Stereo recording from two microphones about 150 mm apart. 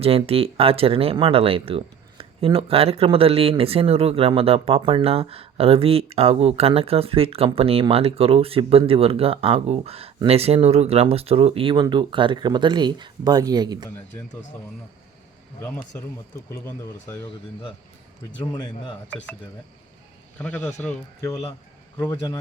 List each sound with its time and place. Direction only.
0.3 s speech: 40° right (ahead or behind)
18.5 s a man's voice: 30° left (ahead or behind)
19.1 s speech: 10° left (ahead or behind)
20.6 s a man's voice: 50° left (ahead or behind)